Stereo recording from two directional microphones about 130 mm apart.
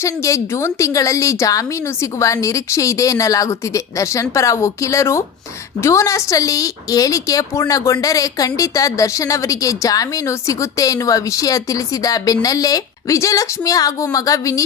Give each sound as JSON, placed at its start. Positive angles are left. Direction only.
{"t": 0.0, "sound": "a woman's voice", "side_deg": 25}